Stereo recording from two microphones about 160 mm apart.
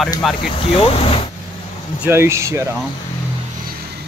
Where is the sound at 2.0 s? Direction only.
15° right (ahead or behind).